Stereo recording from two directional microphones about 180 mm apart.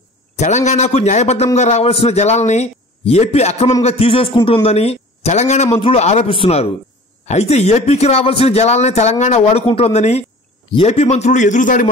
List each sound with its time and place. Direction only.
0.4 s a man's voice: 40° left (ahead or behind)